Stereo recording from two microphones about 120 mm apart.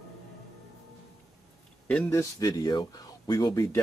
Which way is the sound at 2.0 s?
30° left (ahead or behind).